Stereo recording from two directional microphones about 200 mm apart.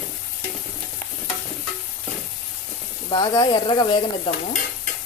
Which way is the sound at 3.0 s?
25° left (ahead or behind).